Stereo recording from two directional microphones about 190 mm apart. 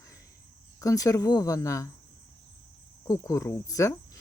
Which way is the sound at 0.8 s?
15° left (ahead or behind).